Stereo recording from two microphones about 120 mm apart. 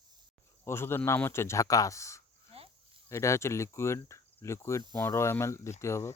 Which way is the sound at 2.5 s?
55° right (ahead or behind).